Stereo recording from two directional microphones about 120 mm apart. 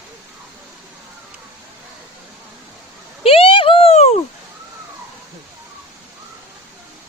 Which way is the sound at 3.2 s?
50° left (ahead or behind).